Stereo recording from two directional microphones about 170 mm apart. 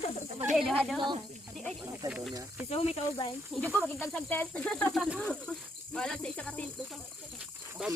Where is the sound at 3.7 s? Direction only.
Centre (ahead or behind).